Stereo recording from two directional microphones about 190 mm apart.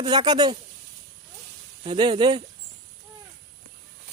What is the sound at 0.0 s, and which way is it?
Speech, 20° right (ahead or behind).